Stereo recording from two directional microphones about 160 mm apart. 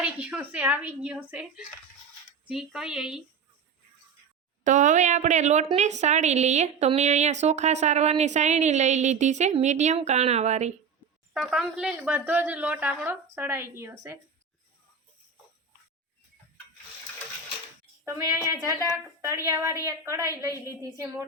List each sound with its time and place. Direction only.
0.0 s a woman's voice: 5° right (ahead or behind)
4.6 s a woman's voice: 50° right (ahead or behind)
11.3 s a woman's voice: 5° right (ahead or behind)
18.6 s a woman's voice: 20° right (ahead or behind)